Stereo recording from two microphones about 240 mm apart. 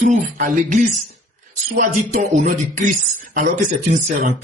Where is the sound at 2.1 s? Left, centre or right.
Right.